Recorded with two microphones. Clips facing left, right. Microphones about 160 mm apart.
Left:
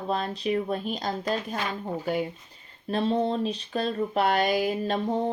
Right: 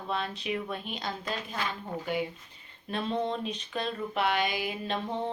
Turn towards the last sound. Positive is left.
turn(degrees=40)  # may be behind; listen again after turning